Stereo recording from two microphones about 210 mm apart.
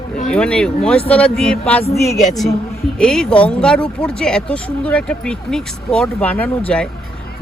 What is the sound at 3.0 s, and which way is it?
Speech, 5° left (ahead or behind).